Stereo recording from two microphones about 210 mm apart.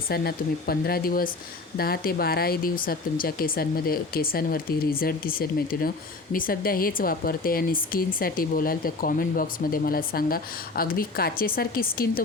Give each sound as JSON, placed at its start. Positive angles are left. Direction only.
{"t": 0.1, "sound": "speech", "side_deg": 45}